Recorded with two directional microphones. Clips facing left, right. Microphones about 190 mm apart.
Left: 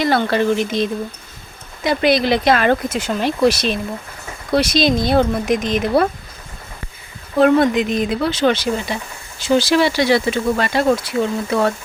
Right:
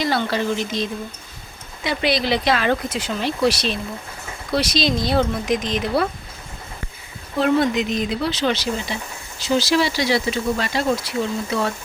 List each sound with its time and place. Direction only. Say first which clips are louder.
0.0 s speech: left 5 dB; 55° left (ahead or behind)
7.3 s speech: left 5 dB; 50° left (ahead or behind)